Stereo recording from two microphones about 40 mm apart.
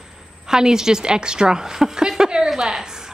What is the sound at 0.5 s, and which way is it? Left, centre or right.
A woman's voice, centre.